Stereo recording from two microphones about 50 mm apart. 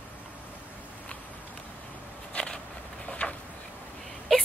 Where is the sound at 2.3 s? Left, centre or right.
Left.